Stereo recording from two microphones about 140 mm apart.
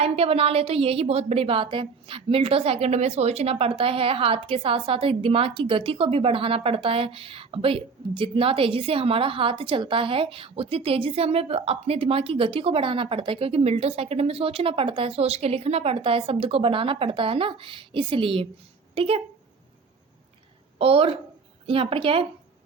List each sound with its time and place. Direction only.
0.0 s a woman's voice: 45° right (ahead or behind)
20.7 s a woman's voice: 40° right (ahead or behind)